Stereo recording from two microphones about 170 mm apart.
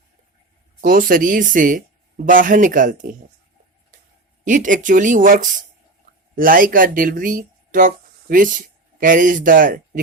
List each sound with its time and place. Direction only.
0.8 s speech: 55° right (ahead or behind)
4.4 s speech: 50° right (ahead or behind)